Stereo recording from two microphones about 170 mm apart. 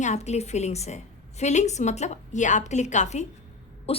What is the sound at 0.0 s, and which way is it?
A woman's voice, 40° left (ahead or behind).